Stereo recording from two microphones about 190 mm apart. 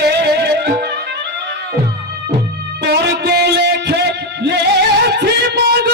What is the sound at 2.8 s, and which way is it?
Music, 60° right (ahead or behind).